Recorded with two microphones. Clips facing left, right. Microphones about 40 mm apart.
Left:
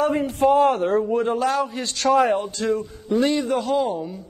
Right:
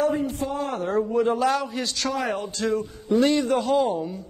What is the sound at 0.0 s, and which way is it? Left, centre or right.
Speech, left.